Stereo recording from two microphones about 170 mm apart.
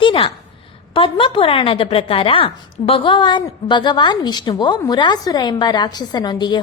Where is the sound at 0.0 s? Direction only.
30° left (ahead or behind).